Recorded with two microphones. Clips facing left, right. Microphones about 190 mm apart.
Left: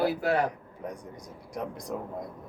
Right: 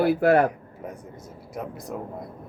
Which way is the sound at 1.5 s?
5° right (ahead or behind).